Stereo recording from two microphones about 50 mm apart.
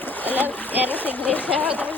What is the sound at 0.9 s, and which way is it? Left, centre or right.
Speech, left.